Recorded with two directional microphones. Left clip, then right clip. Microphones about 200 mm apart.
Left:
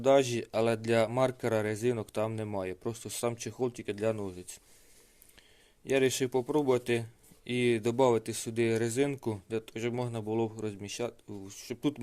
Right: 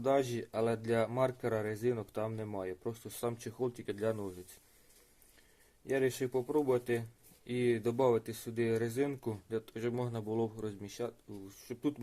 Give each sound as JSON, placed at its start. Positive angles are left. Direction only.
{"t": 0.0, "sound": "speech", "side_deg": 30}
{"t": 5.8, "sound": "speech", "side_deg": 40}